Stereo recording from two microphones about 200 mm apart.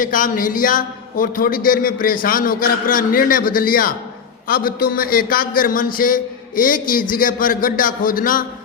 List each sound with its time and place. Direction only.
0.0 s a man's voice: 45° left (ahead or behind)